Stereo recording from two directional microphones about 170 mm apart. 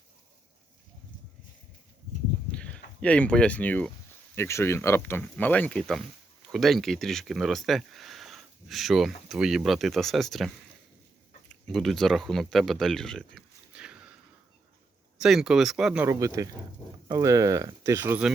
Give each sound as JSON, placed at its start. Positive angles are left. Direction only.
{"t": 2.5, "sound": "speech", "side_deg": 5}
{"t": 15.2, "sound": "speech", "side_deg": 0}
{"t": 16.0, "sound": "speech", "side_deg": -20}